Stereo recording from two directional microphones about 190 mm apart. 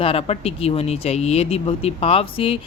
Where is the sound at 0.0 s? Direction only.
30° left (ahead or behind).